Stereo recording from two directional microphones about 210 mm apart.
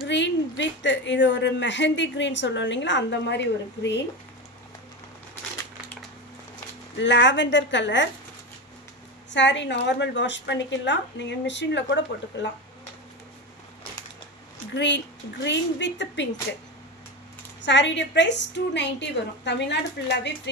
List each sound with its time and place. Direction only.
0.0 s a woman's voice: 60° left (ahead or behind)
7.0 s a woman's voice: 60° left (ahead or behind)
9.3 s a woman's voice: 60° left (ahead or behind)
14.7 s a woman's voice: 55° left (ahead or behind)
17.6 s a woman's voice: 60° left (ahead or behind)